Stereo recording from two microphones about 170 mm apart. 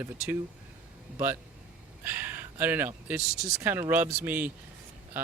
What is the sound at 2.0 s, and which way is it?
Speech, 10° right (ahead or behind).